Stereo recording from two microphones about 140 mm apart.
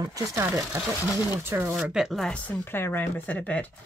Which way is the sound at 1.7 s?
Centre (ahead or behind).